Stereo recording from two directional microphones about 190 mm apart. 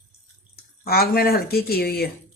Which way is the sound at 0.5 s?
55° left (ahead or behind).